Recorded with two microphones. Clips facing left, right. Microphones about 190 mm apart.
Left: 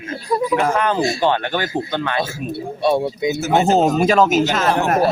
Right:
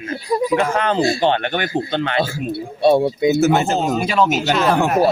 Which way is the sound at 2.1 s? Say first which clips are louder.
Right 2 dB; 30° right (ahead or behind).